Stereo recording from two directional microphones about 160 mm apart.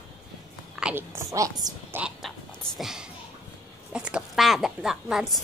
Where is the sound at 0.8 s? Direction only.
15° right (ahead or behind).